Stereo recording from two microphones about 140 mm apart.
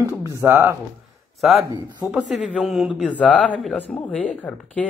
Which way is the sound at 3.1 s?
10° left (ahead or behind).